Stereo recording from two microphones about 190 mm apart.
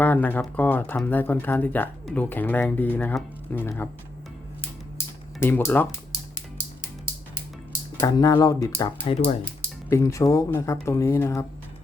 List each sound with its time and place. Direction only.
0.0 s speech: 10° left (ahead or behind)
5.4 s speech: 10° left (ahead or behind)
7.9 s speech: 20° left (ahead or behind)